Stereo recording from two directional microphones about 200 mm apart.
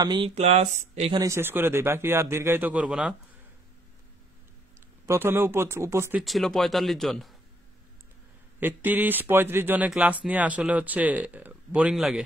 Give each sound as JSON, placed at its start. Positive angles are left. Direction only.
{"t": 0.0, "sound": "speech", "side_deg": -25}
{"t": 1.2, "sound": "speech", "side_deg": -10}
{"t": 5.0, "sound": "speech", "side_deg": -10}
{"t": 6.2, "sound": "speech", "side_deg": 0}
{"t": 8.5, "sound": "speech", "side_deg": -10}